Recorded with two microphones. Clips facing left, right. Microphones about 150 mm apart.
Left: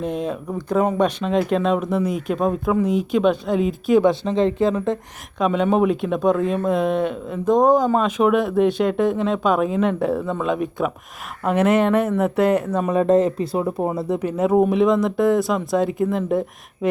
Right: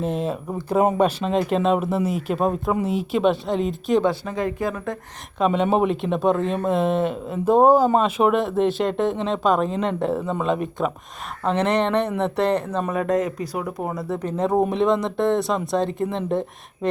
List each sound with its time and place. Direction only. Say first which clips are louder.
0.0 s speech: even; centre (ahead or behind)
4.0 s speech: left 5 dB; 25° left (ahead or behind)
5.4 s speech: left 1 dB; centre (ahead or behind)
12.9 s speech: left 7 dB; 30° left (ahead or behind)
14.2 s speech: left 3 dB; 10° left (ahead or behind)